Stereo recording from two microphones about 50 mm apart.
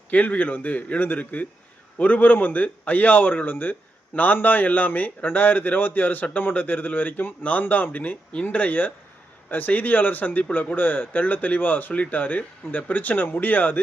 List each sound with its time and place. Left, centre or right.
0.1 s a man's voice: left